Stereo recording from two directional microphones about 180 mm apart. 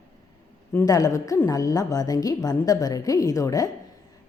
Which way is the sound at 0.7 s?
15° left (ahead or behind).